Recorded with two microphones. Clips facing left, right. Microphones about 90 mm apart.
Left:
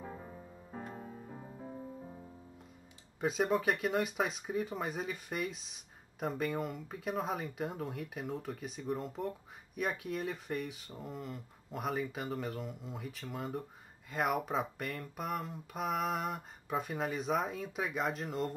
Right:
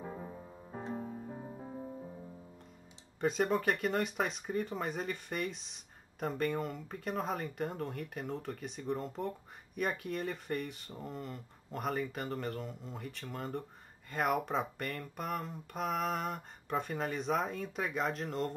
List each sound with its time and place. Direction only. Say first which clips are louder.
0.8 s music: right 5 dB; 20° right (ahead or behind)
3.2 s speech: even; 5° left (ahead or behind)